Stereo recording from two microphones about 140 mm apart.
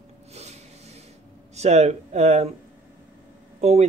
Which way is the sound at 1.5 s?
50° right (ahead or behind).